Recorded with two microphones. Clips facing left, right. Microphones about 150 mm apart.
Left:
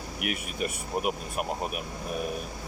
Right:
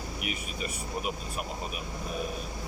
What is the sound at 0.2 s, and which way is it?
Speech, 55° left (ahead or behind).